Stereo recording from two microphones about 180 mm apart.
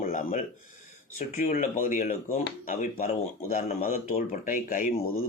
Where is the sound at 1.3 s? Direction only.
50° left (ahead or behind).